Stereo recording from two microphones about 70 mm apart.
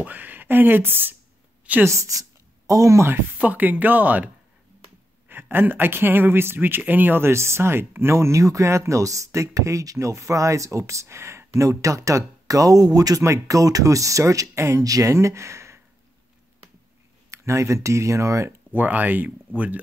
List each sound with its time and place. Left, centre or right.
0.0 s speech: right
1.9 s speech: right
3.3 s speech: right
5.3 s speech: right
13.2 s speech: right
17.3 s speech: right
18.7 s speech: right